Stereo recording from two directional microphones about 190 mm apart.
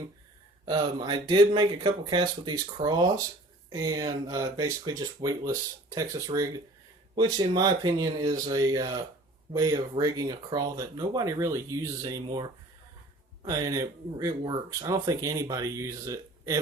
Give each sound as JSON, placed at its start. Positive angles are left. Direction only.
{"t": 0.6, "sound": "speech", "side_deg": -25}